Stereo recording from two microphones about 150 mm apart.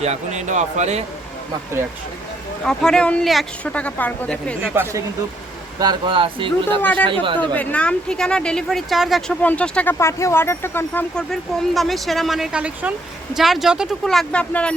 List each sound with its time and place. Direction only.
0.0 s speech: 50° right (ahead or behind)
2.6 s speech: 5° left (ahead or behind)
4.7 s speech: 15° right (ahead or behind)
5.8 s speech: 30° right (ahead or behind)
6.8 s speech: 10° left (ahead or behind)
7.1 s speech: 35° right (ahead or behind)
7.5 s speech: 10° left (ahead or behind)
11.2 s speech: 5° left (ahead or behind)